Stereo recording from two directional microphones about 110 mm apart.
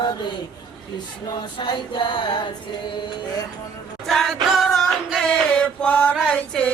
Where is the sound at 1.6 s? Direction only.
45° left (ahead or behind).